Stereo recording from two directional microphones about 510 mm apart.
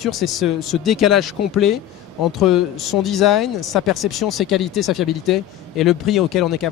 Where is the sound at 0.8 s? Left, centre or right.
Left.